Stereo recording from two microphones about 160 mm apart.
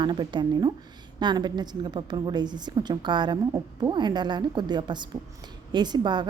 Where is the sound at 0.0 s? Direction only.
30° right (ahead or behind).